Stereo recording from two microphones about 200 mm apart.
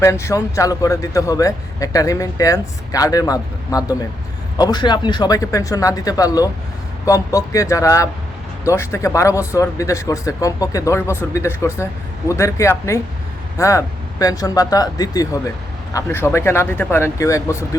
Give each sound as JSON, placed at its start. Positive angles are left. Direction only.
{"t": 0.0, "sound": "speech", "side_deg": 15}